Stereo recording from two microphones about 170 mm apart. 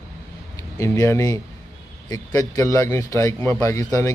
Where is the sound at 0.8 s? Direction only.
15° left (ahead or behind).